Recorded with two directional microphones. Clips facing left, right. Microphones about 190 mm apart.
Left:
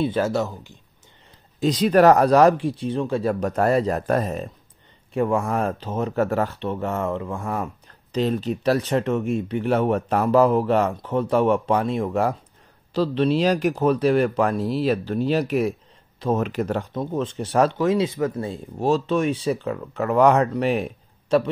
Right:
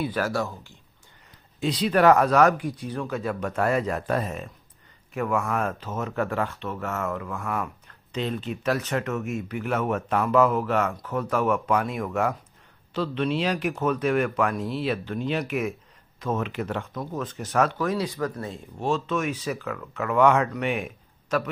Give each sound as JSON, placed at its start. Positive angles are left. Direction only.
{"t": 0.0, "sound": "speech", "side_deg": 25}
{"t": 1.6, "sound": "speech", "side_deg": 40}